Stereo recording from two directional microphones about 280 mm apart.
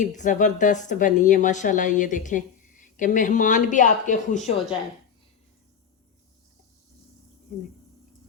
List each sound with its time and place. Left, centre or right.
0.0 s speech: left